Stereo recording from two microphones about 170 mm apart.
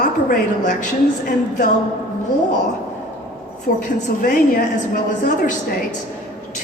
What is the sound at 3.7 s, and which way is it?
A woman's voice, 60° left (ahead or behind).